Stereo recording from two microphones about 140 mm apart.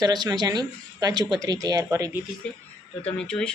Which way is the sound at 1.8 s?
15° right (ahead or behind).